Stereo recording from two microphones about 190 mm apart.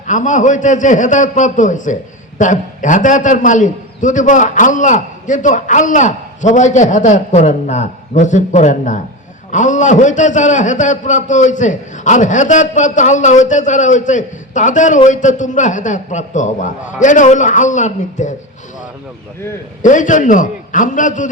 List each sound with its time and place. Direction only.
0.1 s a man's voice: 40° left (ahead or behind)
19.8 s a man's voice: 40° left (ahead or behind)